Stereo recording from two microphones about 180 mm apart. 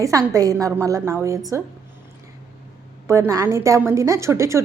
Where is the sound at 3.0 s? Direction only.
15° right (ahead or behind).